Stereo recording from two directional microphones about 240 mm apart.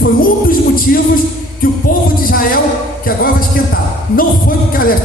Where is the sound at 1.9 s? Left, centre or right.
Left.